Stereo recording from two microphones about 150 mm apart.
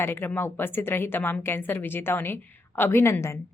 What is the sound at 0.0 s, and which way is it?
A woman's voice, 15° left (ahead or behind).